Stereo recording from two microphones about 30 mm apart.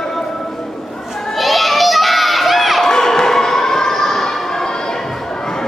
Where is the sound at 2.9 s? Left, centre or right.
Centre.